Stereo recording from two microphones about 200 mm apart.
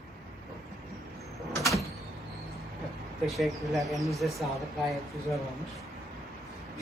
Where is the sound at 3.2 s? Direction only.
Centre (ahead or behind).